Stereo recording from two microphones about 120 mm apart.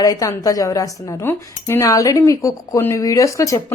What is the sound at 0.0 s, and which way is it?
Speech, 30° left (ahead or behind).